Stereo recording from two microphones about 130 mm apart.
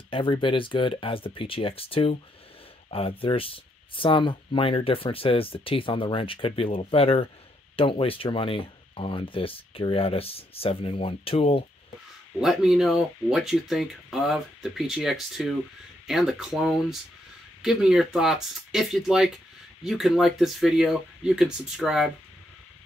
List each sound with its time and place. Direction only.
0.1 s speech: 40° left (ahead or behind)
12.4 s speech: centre (ahead or behind)